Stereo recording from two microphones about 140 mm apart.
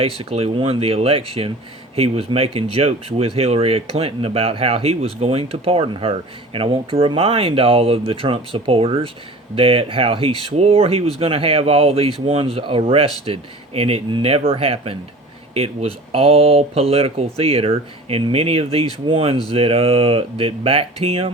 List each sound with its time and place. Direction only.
0.0 s speech: 45° right (ahead or behind)